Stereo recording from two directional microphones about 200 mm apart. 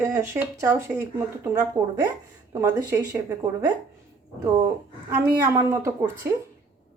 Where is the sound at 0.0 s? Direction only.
15° right (ahead or behind).